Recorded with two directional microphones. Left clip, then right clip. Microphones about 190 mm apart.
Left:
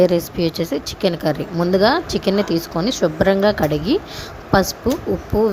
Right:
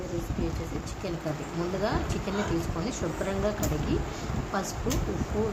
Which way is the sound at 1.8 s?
45° left (ahead or behind).